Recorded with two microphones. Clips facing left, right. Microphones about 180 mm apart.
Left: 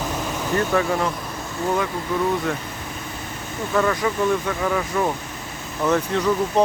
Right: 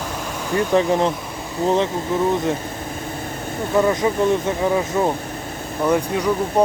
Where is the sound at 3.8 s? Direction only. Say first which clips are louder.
Right 3 dB; 20° right (ahead or behind).